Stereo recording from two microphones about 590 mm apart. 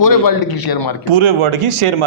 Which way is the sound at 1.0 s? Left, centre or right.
Right.